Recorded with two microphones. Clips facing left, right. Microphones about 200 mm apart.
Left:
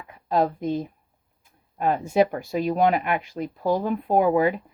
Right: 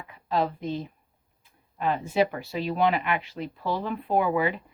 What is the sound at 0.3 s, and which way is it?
A woman's voice, 45° left (ahead or behind).